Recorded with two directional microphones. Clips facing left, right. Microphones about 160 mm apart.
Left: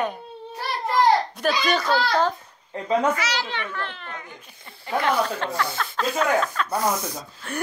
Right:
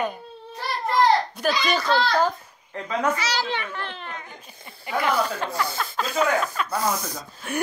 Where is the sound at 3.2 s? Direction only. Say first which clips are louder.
Right 1 dB; 35° right (ahead or behind).